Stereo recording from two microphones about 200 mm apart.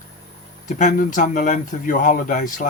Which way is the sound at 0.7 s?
40° left (ahead or behind).